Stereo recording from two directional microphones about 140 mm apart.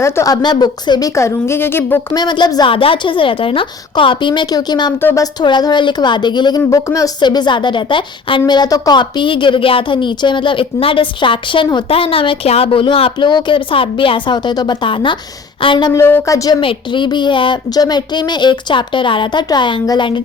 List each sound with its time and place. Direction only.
0.0 s a woman's voice: 25° left (ahead or behind)
2.1 s speech: 30° left (ahead or behind)
15.9 s a woman's voice: 20° left (ahead or behind)
16.6 s speech: 35° left (ahead or behind)